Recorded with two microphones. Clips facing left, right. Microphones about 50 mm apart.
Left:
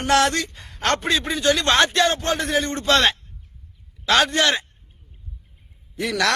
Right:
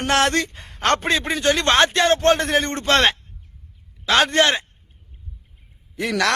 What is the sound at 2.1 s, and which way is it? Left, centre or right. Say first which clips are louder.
Speech: right 5 dB; right.